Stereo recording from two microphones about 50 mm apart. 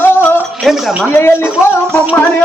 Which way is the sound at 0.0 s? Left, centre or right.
Left.